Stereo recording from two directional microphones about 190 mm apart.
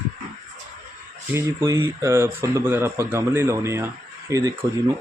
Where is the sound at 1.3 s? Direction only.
15° right (ahead or behind).